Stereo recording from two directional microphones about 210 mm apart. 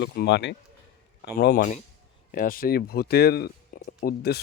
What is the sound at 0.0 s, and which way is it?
Speech, 50° left (ahead or behind).